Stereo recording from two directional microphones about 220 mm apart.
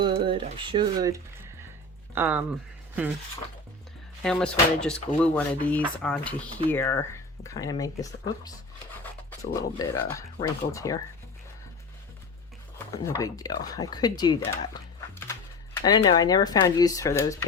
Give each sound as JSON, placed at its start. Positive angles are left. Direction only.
{"t": 0.0, "sound": "speech", "side_deg": -25}
{"t": 4.2, "sound": "speech", "side_deg": 5}
{"t": 12.9, "sound": "speech", "side_deg": 15}